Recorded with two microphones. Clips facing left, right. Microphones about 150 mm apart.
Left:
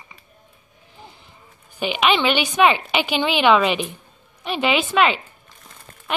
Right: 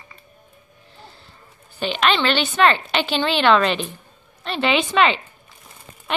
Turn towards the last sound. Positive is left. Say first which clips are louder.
# even
turn(degrees=5)  # may be behind; listen again after turning